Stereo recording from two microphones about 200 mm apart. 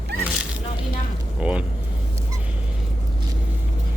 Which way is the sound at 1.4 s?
5° right (ahead or behind).